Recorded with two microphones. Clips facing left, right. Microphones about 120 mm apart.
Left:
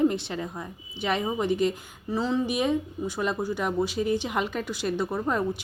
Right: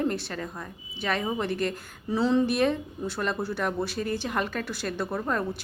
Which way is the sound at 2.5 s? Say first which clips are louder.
Right 1 dB; 15° left (ahead or behind).